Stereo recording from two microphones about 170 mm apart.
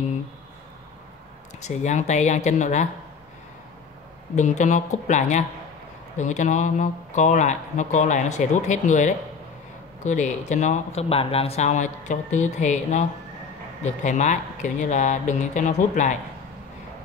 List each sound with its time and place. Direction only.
1.6 s speech: 40° left (ahead or behind)
4.4 s speech: 45° left (ahead or behind)